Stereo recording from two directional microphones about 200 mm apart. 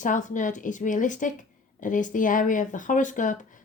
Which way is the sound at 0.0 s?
40° left (ahead or behind).